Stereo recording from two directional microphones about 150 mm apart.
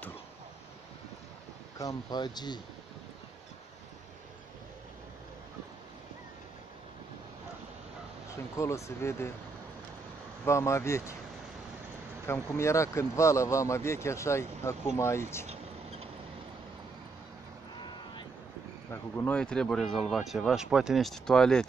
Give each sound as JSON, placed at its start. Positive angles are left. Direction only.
{"t": 1.8, "sound": "speech", "side_deg": 25}
{"t": 8.3, "sound": "speech", "side_deg": 20}
{"t": 10.4, "sound": "speech", "side_deg": 20}
{"t": 12.3, "sound": "speech", "side_deg": 20}
{"t": 15.4, "sound": "a sound", "side_deg": -45}
{"t": 18.9, "sound": "speech", "side_deg": 15}